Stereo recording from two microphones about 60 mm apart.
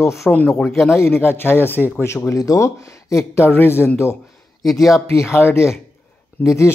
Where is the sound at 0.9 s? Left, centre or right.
Left.